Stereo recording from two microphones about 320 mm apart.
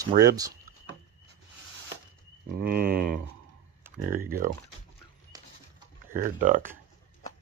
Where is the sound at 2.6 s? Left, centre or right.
Right.